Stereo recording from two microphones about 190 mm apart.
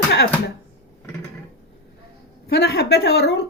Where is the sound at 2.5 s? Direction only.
60° left (ahead or behind).